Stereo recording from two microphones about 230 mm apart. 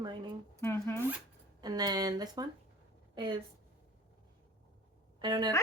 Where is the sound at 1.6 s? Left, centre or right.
Centre.